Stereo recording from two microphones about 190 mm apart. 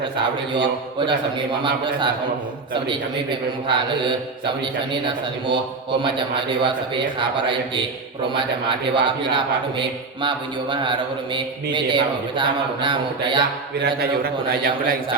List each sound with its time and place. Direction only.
0.2 s mantra: 25° right (ahead or behind)
9.0 s mantra: 25° right (ahead or behind)
13.7 s a man's voice: 60° right (ahead or behind)